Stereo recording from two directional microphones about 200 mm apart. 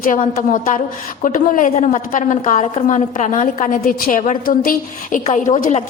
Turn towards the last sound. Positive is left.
turn(degrees=30)  # may be behind; listen again after turning